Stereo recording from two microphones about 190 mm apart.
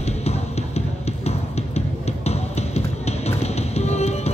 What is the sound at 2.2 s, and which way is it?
Music, 35° left (ahead or behind).